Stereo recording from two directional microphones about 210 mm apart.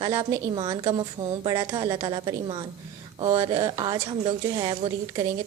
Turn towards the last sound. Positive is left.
turn(degrees=-20)  # may be behind; listen again after turning